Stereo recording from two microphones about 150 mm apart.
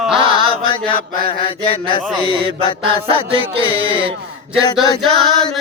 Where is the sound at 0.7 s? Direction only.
35° left (ahead or behind).